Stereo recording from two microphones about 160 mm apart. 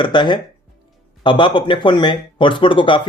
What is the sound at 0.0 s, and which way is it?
Speech, 30° left (ahead or behind).